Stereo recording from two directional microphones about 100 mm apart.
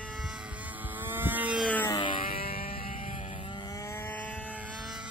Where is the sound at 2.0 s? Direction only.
55° left (ahead or behind).